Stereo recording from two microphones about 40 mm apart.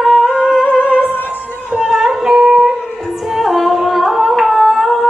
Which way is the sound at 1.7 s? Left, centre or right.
Centre.